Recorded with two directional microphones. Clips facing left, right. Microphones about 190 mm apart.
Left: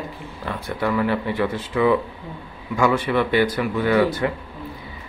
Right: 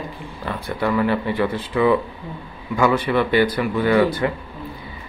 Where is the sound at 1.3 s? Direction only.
30° right (ahead or behind).